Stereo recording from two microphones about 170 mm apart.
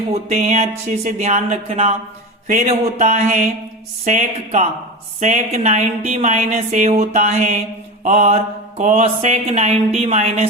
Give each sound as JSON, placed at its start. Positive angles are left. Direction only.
{"t": 0.1, "sound": "speech", "side_deg": -40}